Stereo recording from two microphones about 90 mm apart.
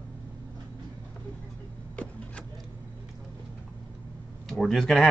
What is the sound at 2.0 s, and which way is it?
Speech, 10° left (ahead or behind).